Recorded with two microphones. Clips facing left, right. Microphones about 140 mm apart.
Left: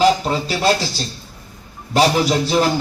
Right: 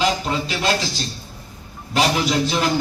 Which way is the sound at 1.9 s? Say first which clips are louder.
Left 4 dB; 35° left (ahead or behind).